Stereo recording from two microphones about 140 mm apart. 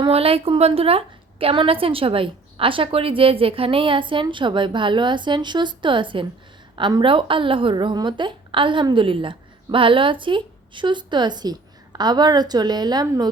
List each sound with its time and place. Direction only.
0.0 s a woman's voice: 45° right (ahead or behind)